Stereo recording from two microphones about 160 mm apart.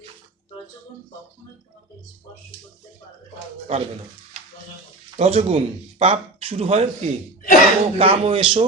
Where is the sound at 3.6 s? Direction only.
35° right (ahead or behind).